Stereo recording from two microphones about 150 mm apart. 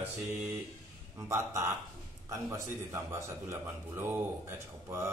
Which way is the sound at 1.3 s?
20° right (ahead or behind).